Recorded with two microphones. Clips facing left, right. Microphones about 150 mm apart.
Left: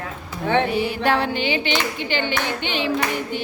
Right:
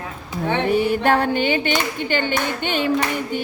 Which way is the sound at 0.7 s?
50° right (ahead or behind).